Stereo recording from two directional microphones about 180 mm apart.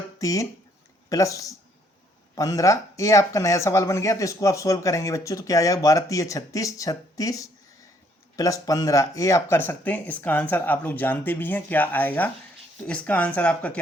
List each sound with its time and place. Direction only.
0.2 s speech: 20° left (ahead or behind)